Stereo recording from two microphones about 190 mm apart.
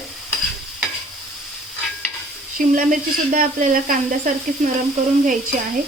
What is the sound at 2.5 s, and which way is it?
A woman's voice, 45° right (ahead or behind).